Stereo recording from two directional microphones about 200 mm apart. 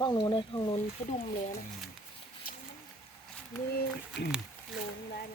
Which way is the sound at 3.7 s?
55° left (ahead or behind).